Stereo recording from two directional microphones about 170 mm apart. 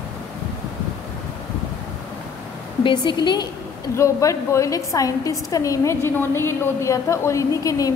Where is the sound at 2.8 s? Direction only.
30° left (ahead or behind).